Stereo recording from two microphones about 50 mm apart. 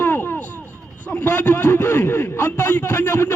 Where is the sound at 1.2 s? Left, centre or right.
Left.